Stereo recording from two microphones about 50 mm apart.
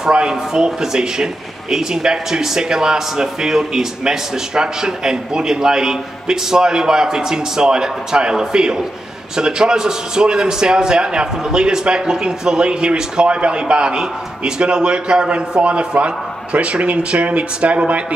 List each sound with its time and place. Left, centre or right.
0.0 s a man's voice: centre